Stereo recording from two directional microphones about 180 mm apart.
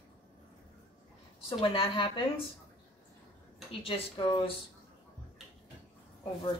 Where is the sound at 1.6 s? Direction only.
30° left (ahead or behind).